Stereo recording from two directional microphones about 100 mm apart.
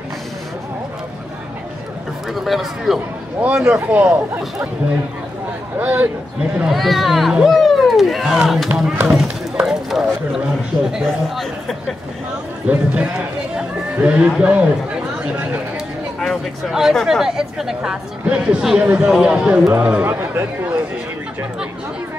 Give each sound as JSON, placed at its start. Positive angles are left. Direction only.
{"t": 2.3, "sound": "a man's voice", "side_deg": 0}
{"t": 5.8, "sound": "a man's voice", "side_deg": -15}
{"t": 6.6, "sound": "a man's voice", "side_deg": 0}
{"t": 9.7, "sound": "run", "side_deg": -5}
{"t": 10.9, "sound": "speech", "side_deg": 0}
{"t": 12.6, "sound": "a man's voice", "side_deg": -15}
{"t": 16.2, "sound": "a man's voice", "side_deg": 0}